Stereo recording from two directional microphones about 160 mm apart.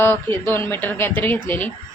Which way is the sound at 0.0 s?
15° left (ahead or behind).